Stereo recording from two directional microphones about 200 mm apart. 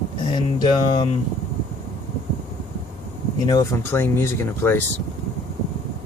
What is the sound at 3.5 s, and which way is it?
Speech, 15° left (ahead or behind).